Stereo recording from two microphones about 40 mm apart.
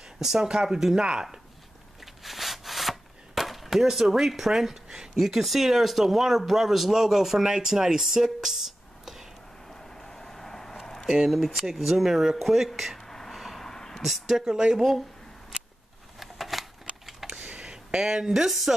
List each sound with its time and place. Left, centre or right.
0.2 s speech: centre
2.2 s wood: centre
9.7 s vehicle: centre
11.1 s speech: centre
13.0 s a sound: centre
13.3 s vehicle: centre
13.7 s a sound: centre
14.0 s speech: centre
14.8 s speech: centre
16.2 s shuffling cards: centre
17.3 s a sound: right
17.6 s a sound: centre
18.5 s speech: centre